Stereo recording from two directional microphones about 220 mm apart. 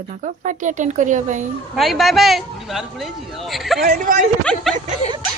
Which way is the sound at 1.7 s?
Centre (ahead or behind).